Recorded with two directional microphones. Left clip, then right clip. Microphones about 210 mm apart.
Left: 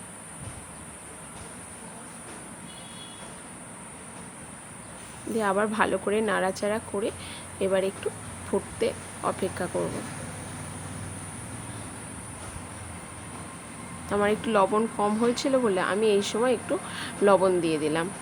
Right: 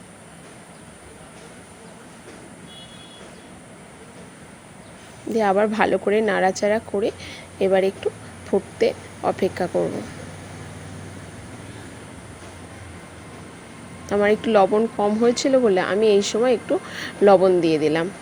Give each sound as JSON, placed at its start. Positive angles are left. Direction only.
{"t": 5.3, "sound": "speech", "side_deg": -20}
{"t": 14.1, "sound": "speech", "side_deg": -20}